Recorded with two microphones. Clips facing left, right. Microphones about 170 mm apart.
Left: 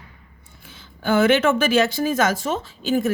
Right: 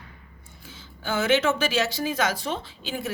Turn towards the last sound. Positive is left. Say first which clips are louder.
# left 11 dB
turn(degrees=45)  # may be behind; listen again after turning